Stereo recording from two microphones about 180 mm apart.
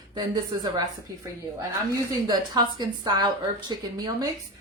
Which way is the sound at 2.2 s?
20° right (ahead or behind).